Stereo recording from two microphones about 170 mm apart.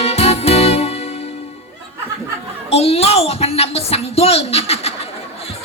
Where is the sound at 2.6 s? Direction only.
35° left (ahead or behind).